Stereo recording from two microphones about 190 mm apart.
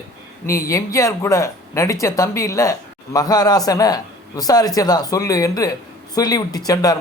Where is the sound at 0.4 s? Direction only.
15° left (ahead or behind).